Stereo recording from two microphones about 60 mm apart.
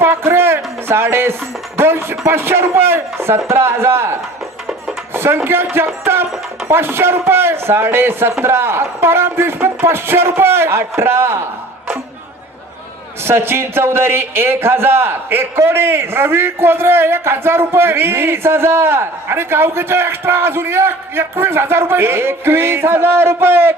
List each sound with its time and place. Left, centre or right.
0.0 s speech: right
13.2 s speech: right